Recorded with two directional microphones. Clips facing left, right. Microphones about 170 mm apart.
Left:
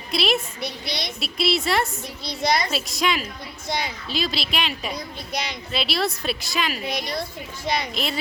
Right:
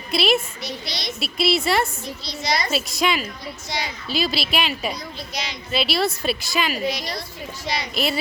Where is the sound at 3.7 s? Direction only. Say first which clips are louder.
Left 2 dB; 55° left (ahead or behind).